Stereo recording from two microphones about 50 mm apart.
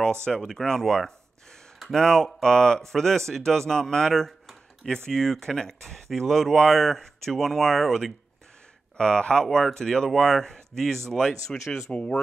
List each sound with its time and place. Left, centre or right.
0.5 s speech: centre
8.9 s speech: centre
11.9 s speech: left